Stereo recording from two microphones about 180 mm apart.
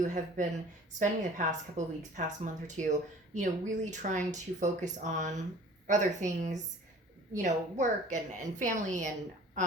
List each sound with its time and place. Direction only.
0.0 s a woman's voice: 40° right (ahead or behind)